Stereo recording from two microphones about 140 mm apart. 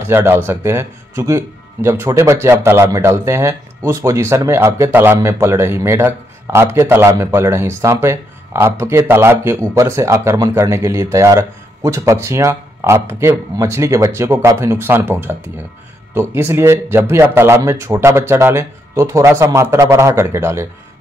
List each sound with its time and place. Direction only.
0.0 s speech: 15° right (ahead or behind)